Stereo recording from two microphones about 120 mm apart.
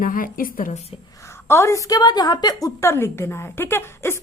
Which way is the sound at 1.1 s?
25° left (ahead or behind).